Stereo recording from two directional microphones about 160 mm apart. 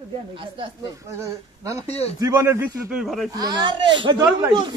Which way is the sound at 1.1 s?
20° right (ahead or behind).